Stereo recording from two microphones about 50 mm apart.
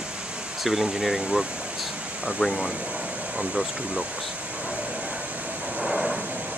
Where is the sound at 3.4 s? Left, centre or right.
Centre.